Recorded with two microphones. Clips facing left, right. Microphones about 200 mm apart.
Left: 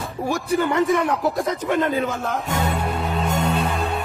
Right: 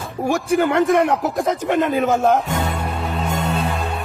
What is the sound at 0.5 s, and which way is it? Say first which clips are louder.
A man's voice: right 3 dB; 75° right (ahead or behind).